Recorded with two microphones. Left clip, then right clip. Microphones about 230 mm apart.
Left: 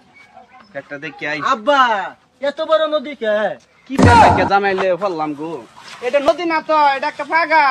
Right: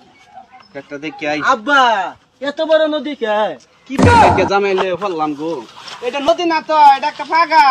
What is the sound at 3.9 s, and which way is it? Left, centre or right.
Speech, centre.